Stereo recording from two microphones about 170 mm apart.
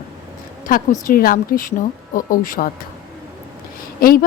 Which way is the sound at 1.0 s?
55° left (ahead or behind).